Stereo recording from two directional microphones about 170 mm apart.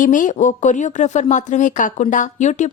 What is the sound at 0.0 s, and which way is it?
Speech, 50° left (ahead or behind).